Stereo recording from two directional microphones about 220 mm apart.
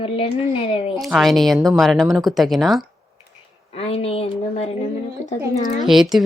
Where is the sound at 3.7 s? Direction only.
25° left (ahead or behind).